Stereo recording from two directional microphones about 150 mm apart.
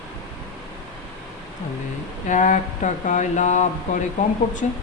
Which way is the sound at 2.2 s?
55° left (ahead or behind).